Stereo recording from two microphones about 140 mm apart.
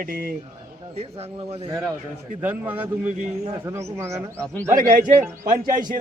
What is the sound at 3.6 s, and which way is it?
Speech, 20° right (ahead or behind).